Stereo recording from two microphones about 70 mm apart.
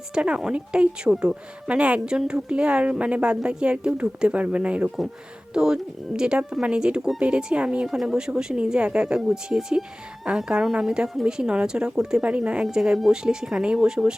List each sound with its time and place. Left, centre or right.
0.1 s speech: centre